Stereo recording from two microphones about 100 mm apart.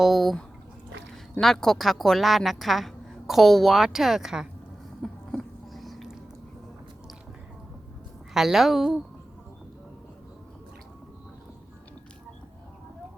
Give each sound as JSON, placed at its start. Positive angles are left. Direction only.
{"t": 0.0, "sound": "a woman's voice", "side_deg": 0}
{"t": 1.4, "sound": "a woman's voice", "side_deg": 5}
{"t": 5.0, "sound": "a sound", "side_deg": 5}
{"t": 8.3, "sound": "a woman's voice", "side_deg": 0}